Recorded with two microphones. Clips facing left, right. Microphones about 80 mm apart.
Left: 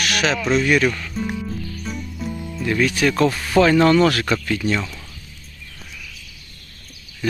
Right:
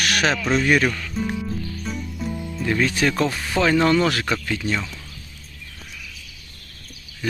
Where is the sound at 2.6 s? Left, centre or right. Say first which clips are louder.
Left 2 dB; right.